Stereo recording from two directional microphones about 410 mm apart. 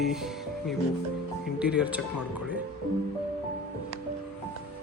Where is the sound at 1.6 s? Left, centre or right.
Centre.